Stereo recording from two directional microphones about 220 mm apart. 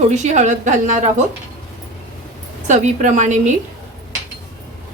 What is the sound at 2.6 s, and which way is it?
Speech, 35° right (ahead or behind).